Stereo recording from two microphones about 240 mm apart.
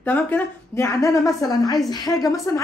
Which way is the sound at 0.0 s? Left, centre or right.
Centre.